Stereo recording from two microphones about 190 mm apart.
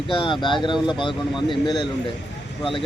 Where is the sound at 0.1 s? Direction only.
25° left (ahead or behind).